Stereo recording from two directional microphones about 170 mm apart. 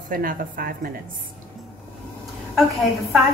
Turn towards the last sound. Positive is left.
turn(degrees=0)  # may be behind; listen again after turning